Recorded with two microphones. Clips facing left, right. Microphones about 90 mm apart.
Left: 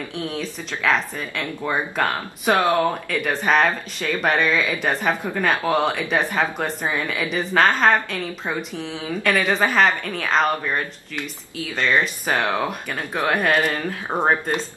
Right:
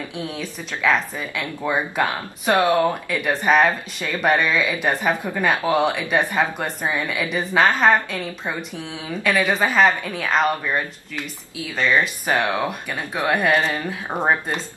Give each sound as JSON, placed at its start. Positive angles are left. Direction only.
{"t": 0.1, "sound": "speech", "side_deg": -5}
{"t": 14.1, "sound": "speech", "side_deg": 20}